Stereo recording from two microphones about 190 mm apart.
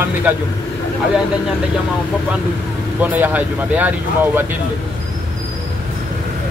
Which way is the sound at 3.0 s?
10° right (ahead or behind).